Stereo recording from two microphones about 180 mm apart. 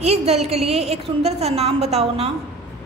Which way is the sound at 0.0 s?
35° right (ahead or behind).